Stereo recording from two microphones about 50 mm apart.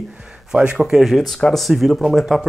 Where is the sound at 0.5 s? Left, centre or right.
Centre.